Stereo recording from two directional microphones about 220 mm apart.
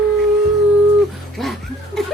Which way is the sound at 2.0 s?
Centre (ahead or behind).